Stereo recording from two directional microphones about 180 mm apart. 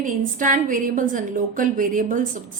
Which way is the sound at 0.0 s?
45° right (ahead or behind).